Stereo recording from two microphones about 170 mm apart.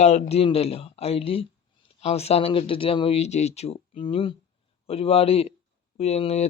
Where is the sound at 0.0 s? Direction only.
40° left (ahead or behind).